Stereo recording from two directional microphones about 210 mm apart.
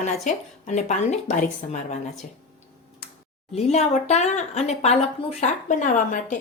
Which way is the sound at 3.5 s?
30° left (ahead or behind).